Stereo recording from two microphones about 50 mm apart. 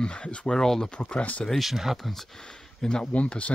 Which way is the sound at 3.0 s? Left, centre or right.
Left.